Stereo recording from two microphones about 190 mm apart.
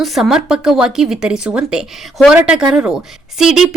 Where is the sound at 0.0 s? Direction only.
Centre (ahead or behind).